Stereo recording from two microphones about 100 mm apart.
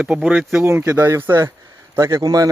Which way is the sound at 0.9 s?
25° right (ahead or behind).